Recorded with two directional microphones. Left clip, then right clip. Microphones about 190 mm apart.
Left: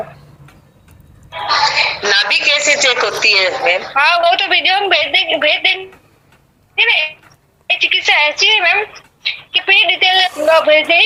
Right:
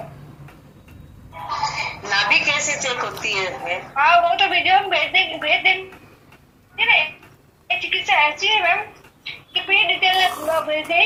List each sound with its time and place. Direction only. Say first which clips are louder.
1.3 s a woman's voice: left 11 dB; 45° left (ahead or behind)